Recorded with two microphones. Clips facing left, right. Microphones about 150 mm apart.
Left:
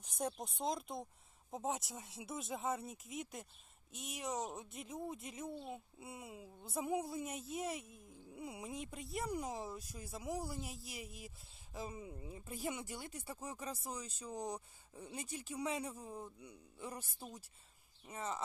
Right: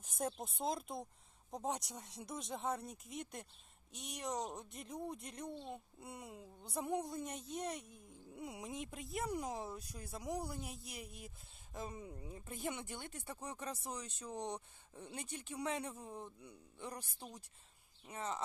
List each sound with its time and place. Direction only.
0.0 s speech: centre (ahead or behind)